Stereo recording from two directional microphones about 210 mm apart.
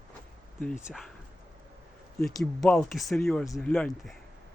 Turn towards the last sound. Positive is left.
turn(degrees=5)  # may be behind; listen again after turning